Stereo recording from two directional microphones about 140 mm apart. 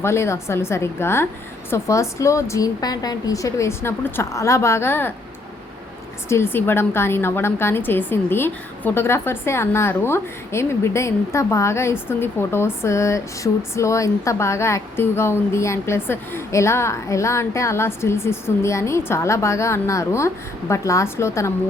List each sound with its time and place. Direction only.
0.0 s a woman's voice: 20° left (ahead or behind)
6.2 s a woman's voice: 20° left (ahead or behind)